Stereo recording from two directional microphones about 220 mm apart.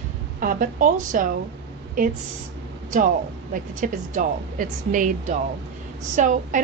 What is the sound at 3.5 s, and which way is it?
A woman's voice, 35° right (ahead or behind).